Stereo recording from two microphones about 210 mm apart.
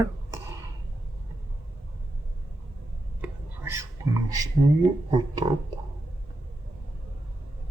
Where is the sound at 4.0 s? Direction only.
15° right (ahead or behind).